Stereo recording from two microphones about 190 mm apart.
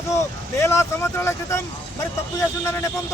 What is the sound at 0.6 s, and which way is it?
Speech, 15° left (ahead or behind).